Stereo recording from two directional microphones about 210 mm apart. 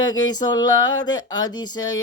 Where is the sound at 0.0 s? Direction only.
20° left (ahead or behind).